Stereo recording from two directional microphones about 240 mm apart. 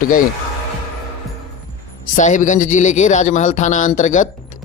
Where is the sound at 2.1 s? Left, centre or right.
Left.